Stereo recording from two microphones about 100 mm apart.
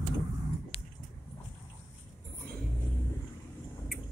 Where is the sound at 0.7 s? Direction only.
75° left (ahead or behind).